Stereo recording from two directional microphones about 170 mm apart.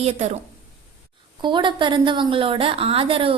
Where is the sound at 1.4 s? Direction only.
30° right (ahead or behind).